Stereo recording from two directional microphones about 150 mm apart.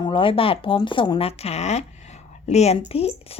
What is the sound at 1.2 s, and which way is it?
A woman's voice, 40° left (ahead or behind).